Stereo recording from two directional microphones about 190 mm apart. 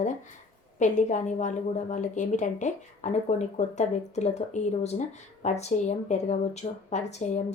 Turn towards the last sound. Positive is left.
turn(degrees=35)  # may be behind; listen again after turning